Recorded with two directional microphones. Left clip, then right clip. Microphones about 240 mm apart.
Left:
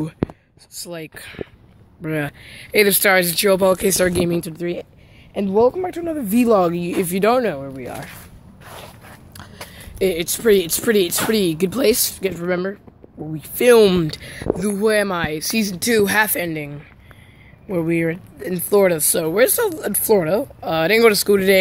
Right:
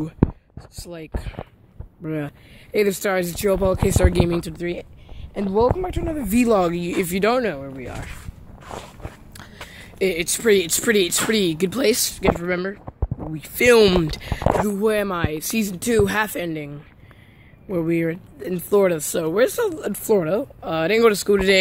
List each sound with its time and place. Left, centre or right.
0.7 s speech: centre
8.6 s walk: centre
9.4 s speech: centre